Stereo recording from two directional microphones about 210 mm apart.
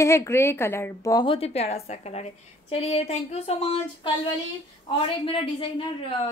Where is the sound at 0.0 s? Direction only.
15° left (ahead or behind).